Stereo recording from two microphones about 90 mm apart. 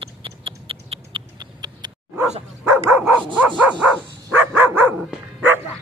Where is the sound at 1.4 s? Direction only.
50° right (ahead or behind).